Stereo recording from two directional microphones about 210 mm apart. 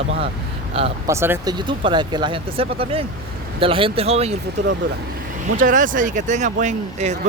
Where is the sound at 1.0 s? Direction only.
10° right (ahead or behind); by 4.4 s 30° right (ahead or behind).